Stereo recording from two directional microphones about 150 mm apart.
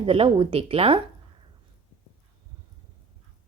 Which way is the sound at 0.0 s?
35° right (ahead or behind).